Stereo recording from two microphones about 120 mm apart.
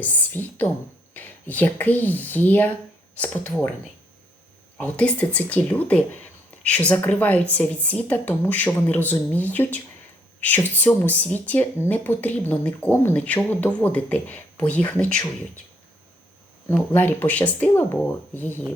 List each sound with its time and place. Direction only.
0.0 s speech: 15° left (ahead or behind)
4.8 s speech: 10° left (ahead or behind)
16.9 s speech: 15° left (ahead or behind)